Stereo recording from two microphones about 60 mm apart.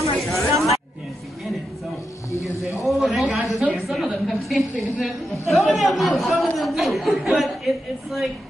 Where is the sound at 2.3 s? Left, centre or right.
Left.